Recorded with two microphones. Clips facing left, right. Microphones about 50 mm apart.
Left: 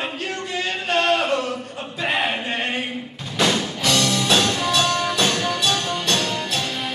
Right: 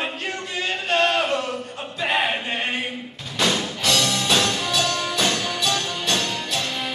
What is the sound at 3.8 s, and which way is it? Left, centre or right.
Music, centre.